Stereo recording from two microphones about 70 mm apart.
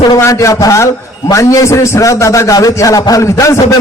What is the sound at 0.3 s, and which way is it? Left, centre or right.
A man's voice, left.